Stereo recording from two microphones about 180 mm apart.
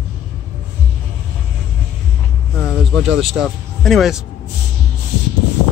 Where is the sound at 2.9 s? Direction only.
Centre (ahead or behind).